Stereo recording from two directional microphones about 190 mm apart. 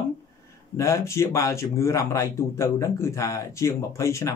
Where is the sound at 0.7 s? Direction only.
15° left (ahead or behind).